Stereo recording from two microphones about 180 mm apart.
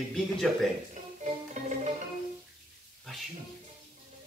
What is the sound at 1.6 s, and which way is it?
Music, 40° right (ahead or behind).